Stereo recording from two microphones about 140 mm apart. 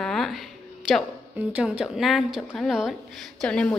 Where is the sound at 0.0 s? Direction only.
5° left (ahead or behind).